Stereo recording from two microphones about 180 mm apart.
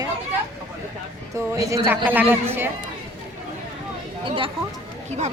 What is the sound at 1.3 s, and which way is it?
A woman's voice, 15° right (ahead or behind).